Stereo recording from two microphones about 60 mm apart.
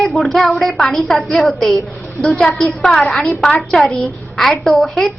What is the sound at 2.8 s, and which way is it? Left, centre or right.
A woman's voice, centre.